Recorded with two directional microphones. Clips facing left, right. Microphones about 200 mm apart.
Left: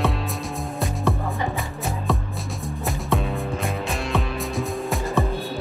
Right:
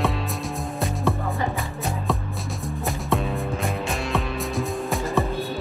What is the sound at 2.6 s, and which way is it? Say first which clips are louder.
Music: even; centre (ahead or behind).